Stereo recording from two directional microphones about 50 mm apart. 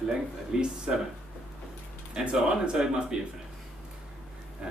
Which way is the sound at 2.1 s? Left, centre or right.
Centre.